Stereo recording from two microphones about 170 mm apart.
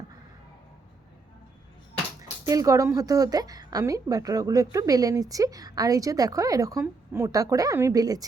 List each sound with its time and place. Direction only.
2.5 s a woman's voice: 20° right (ahead or behind)